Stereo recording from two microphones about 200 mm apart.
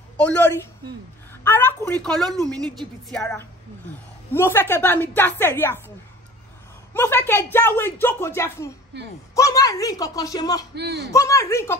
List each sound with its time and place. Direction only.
0.2 s a woman's voice: 10° left (ahead or behind)
2.3 s a woman's voice: 20° right (ahead or behind)
3.1 s a woman's voice: 5° left (ahead or behind)
6.9 s speech: 10° left (ahead or behind)
10.7 s a man's voice: 55° right (ahead or behind)
11.1 s speech: 15° left (ahead or behind)